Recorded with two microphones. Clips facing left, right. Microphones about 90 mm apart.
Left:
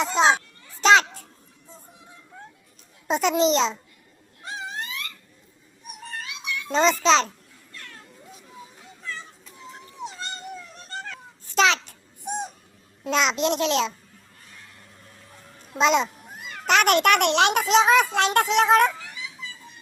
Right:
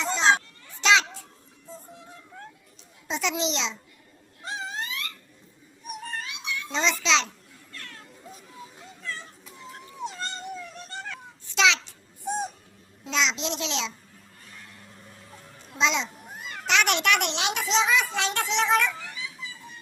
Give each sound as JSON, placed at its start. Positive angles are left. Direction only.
{"t": 0.0, "sound": "children playing", "side_deg": 55}
{"t": 3.1, "sound": "a child's voice", "side_deg": 45}
{"t": 6.7, "sound": "a child's voice", "side_deg": 45}
{"t": 9.6, "sound": "dog", "side_deg": 5}
{"t": 11.4, "sound": "a sound", "side_deg": 45}
{"t": 12.3, "sound": "owl", "side_deg": 20}
{"t": 13.1, "sound": "a child's voice", "side_deg": 50}
{"t": 15.8, "sound": "a child's voice", "side_deg": 50}
{"t": 16.1, "sound": "babbling", "side_deg": 0}
{"t": 16.6, "sound": "a child's voice", "side_deg": 45}